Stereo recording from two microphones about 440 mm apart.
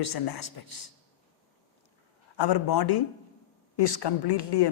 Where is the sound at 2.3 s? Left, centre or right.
Left.